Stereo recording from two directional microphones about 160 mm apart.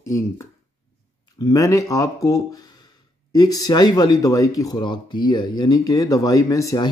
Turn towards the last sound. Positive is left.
turn(degrees=20)  # may be behind; listen again after turning